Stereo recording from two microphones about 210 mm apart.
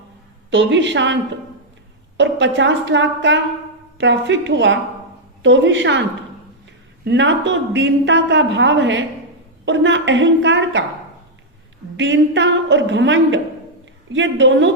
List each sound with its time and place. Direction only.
0.5 s a woman's voice: 60° right (ahead or behind)
7.0 s a woman's voice: 60° right (ahead or behind)
11.9 s a woman's voice: 60° right (ahead or behind)